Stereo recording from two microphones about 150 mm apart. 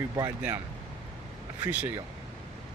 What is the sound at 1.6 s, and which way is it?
Speech, 10° right (ahead or behind).